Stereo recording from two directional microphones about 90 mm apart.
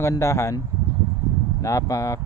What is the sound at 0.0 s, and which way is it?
Speech, 30° left (ahead or behind).